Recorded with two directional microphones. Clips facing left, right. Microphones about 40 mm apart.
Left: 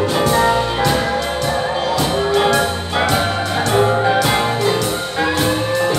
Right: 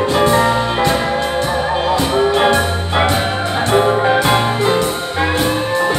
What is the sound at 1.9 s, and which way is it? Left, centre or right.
Music, right.